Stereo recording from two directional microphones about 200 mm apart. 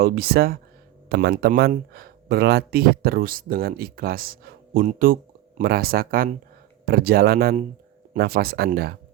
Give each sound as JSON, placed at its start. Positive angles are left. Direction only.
{"t": 0.0, "sound": "speech", "side_deg": -50}